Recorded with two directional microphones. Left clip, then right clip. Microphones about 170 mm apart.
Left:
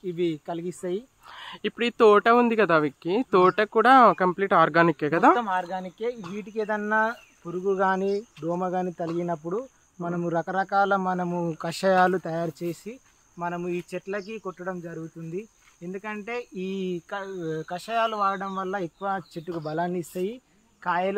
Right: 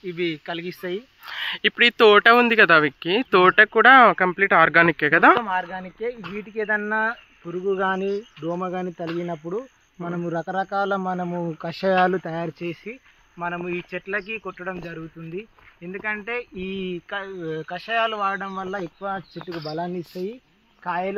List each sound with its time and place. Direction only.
0.0 s speech: 15° left (ahead or behind)
0.8 s speech: 5° right (ahead or behind)
5.4 s speech: 40° right (ahead or behind)
9.6 s speech: 35° right (ahead or behind)
13.4 s speech: 20° right (ahead or behind); by 19.2 s 40° right (ahead or behind)
19.6 s speech: 20° right (ahead or behind)